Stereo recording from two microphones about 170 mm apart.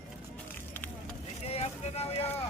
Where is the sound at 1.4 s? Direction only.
35° left (ahead or behind).